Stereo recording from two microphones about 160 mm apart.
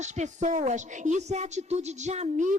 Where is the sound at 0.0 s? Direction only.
45° right (ahead or behind).